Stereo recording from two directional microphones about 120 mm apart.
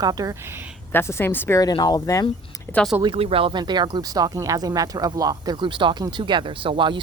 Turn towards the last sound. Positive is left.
turn(degrees=-45)  # may be behind; listen again after turning